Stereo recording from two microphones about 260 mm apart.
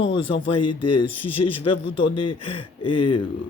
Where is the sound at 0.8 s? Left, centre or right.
Left.